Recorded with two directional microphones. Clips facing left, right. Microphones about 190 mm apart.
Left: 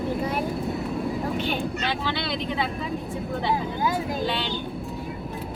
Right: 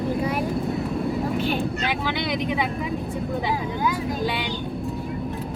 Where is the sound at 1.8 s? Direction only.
15° right (ahead or behind).